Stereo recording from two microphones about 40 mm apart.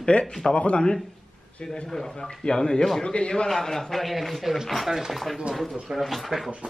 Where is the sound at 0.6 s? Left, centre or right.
Left.